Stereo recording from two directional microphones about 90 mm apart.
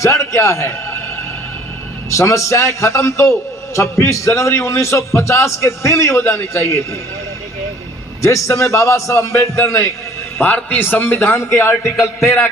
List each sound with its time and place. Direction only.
0.0 s a man's voice: 35° left (ahead or behind)
2.0 s a man's voice: 35° left (ahead or behind)
8.2 s a man's voice: 35° left (ahead or behind)
10.3 s a man's voice: 20° left (ahead or behind)